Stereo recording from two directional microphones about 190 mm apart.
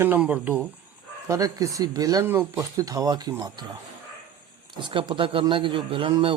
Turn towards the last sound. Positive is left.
turn(degrees=-25)  # may be behind; listen again after turning